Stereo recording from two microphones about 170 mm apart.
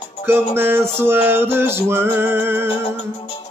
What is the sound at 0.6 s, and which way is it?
Music, 15° right (ahead or behind).